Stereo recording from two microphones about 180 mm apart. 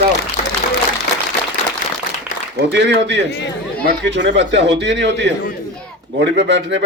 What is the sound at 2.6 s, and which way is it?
A man's voice, 75° right (ahead or behind).